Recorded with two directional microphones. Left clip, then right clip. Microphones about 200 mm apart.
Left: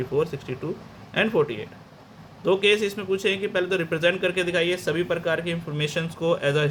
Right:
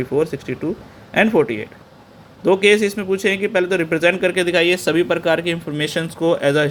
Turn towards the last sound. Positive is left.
turn(degrees=-25)  # may be behind; listen again after turning